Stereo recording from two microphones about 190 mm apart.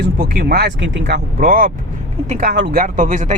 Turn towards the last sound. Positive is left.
turn(degrees=-40)  # may be behind; listen again after turning